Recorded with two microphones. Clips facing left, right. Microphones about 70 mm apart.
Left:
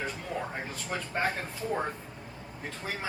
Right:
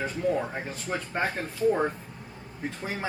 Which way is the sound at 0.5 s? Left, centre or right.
Centre.